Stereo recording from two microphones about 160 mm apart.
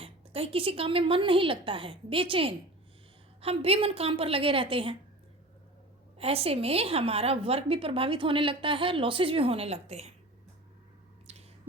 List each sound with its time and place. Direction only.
0.0 s a woman's voice: 35° right (ahead or behind)
6.1 s a woman's voice: 40° right (ahead or behind)
11.3 s squish: 40° right (ahead or behind)